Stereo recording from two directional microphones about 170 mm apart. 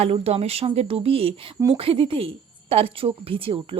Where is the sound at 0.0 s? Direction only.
35° right (ahead or behind).